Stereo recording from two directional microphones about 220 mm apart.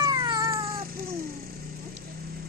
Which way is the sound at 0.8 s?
40° right (ahead or behind).